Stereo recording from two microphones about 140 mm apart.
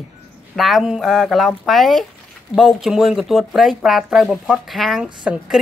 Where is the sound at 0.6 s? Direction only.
Centre (ahead or behind).